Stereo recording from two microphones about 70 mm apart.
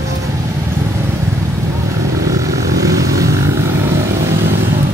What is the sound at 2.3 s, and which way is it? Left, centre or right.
Vehicle, right.